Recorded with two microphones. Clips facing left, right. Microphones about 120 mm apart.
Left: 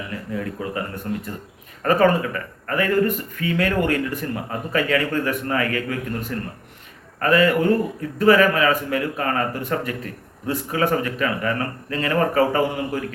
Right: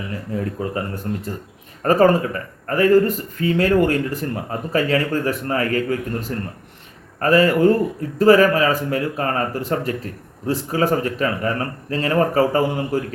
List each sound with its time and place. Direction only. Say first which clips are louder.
0.3 s a man's voice: right 3 dB; 35° right (ahead or behind)